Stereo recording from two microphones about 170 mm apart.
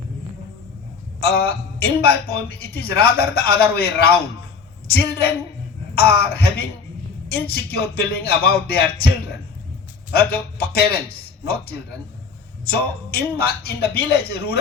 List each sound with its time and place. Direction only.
1.2 s a man's voice: 65° left (ahead or behind)
10.1 s a man's voice: 65° left (ahead or behind)